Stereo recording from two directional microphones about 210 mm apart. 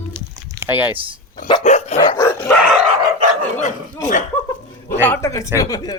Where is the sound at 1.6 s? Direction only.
35° left (ahead or behind).